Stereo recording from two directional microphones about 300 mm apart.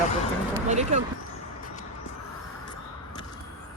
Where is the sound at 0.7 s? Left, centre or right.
Right.